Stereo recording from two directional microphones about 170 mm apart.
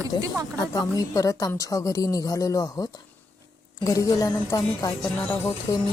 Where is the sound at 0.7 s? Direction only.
20° left (ahead or behind).